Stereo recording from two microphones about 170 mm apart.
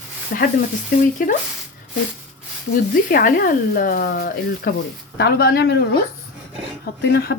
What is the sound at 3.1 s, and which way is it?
A woman's voice, 60° left (ahead or behind).